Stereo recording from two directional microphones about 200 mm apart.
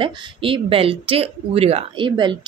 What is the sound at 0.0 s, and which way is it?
Speech, 25° right (ahead or behind).